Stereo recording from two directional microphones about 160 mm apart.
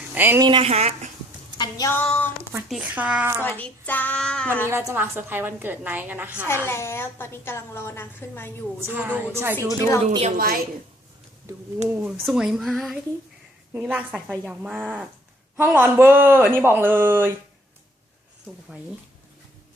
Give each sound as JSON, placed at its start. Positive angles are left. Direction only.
{"t": 0.1, "sound": "speech", "side_deg": -10}
{"t": 0.3, "sound": "speech", "side_deg": -30}
{"t": 1.5, "sound": "speech", "side_deg": 25}
{"t": 1.9, "sound": "a woman's voice", "side_deg": 10}
{"t": 2.6, "sound": "a woman's voice", "side_deg": -5}
{"t": 3.4, "sound": "a woman's voice", "side_deg": 10}
{"t": 4.7, "sound": "a woman's voice", "side_deg": -15}
{"t": 6.5, "sound": "a woman's voice", "side_deg": 15}
{"t": 9.0, "sound": "a woman's voice", "side_deg": -10}
{"t": 9.6, "sound": "a woman's voice", "side_deg": 20}
{"t": 10.3, "sound": "a woman's voice", "side_deg": -65}
{"t": 11.9, "sound": "a woman's voice", "side_deg": -15}